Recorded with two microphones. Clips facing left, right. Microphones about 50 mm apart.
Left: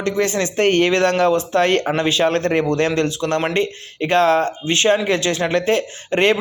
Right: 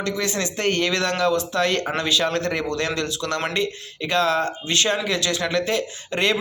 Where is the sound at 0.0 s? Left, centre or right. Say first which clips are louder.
Left 5 dB; left.